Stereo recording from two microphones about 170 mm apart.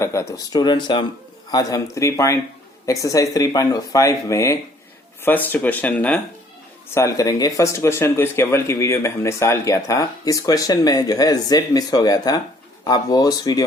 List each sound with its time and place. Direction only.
0.0 s speech: 15° left (ahead or behind)